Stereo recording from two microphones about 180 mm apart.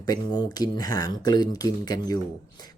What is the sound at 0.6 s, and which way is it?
Speech, 20° left (ahead or behind).